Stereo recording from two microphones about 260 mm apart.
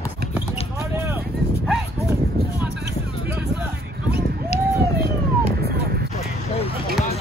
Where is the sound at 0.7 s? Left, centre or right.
Centre.